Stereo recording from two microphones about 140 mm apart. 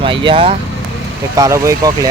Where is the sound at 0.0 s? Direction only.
35° right (ahead or behind).